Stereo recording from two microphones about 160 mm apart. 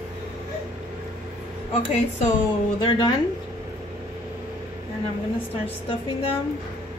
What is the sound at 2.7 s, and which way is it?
Speech, 30° left (ahead or behind).